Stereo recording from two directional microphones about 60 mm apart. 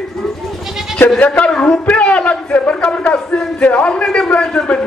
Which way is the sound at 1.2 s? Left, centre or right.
Centre.